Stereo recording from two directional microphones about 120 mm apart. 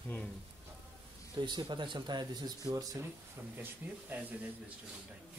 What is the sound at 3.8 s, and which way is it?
Speech, 15° right (ahead or behind).